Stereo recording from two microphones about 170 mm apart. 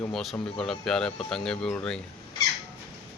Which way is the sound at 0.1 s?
Centre (ahead or behind).